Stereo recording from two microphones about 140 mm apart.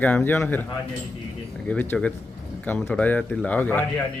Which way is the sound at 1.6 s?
15° left (ahead or behind).